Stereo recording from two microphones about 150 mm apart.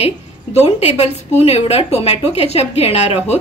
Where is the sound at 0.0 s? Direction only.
45° left (ahead or behind).